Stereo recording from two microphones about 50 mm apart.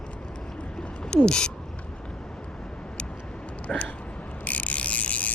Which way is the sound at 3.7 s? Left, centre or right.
Centre.